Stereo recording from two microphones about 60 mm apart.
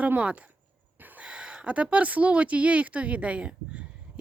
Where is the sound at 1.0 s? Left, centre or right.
Right.